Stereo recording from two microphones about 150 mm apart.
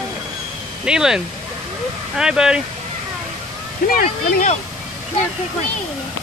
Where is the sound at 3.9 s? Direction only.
70° left (ahead or behind).